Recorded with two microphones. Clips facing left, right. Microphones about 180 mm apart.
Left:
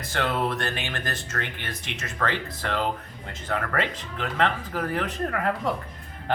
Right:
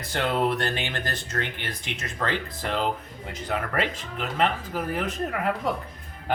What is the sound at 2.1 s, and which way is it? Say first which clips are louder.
Speech: left 1 dB; 15° right (ahead or behind).